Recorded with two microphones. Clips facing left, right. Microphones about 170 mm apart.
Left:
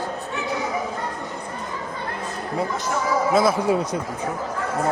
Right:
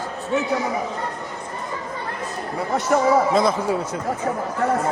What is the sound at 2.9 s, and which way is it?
Speech, 65° right (ahead or behind).